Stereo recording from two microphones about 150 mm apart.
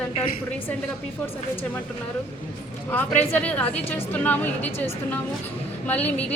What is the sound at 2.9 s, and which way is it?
A woman's voice, 10° left (ahead or behind).